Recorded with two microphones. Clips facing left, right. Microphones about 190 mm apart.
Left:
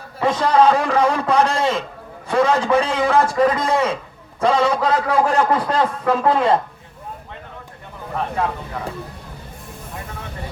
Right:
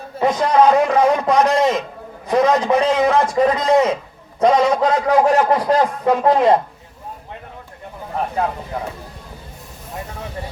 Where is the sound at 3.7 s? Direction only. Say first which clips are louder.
Right 4 dB; 30° left (ahead or behind).